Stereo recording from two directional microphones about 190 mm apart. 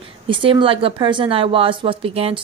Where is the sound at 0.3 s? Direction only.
25° right (ahead or behind).